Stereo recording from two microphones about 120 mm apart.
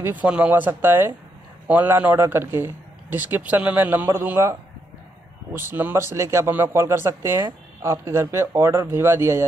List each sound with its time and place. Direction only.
0.0 s a man's voice: 10° right (ahead or behind)